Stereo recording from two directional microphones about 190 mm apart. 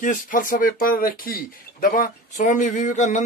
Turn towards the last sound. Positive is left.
turn(degrees=40)  # may be behind; listen again after turning